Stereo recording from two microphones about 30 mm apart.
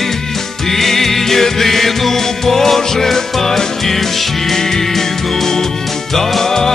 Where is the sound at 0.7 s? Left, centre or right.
Centre.